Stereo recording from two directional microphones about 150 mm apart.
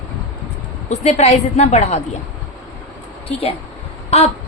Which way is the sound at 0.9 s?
50° left (ahead or behind).